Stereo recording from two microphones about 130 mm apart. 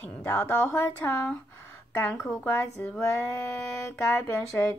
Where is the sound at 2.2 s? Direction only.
15° left (ahead or behind).